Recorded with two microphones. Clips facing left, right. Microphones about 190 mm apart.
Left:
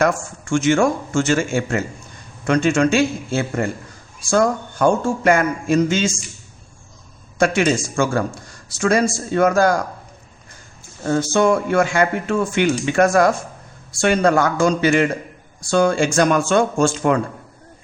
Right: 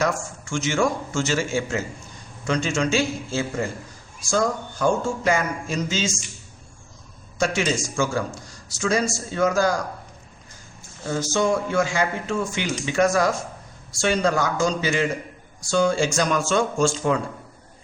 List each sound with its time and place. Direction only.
0.0 s a man's voice: 55° left (ahead or behind)
7.3 s a man's voice: 55° left (ahead or behind)
11.0 s a man's voice: 60° left (ahead or behind)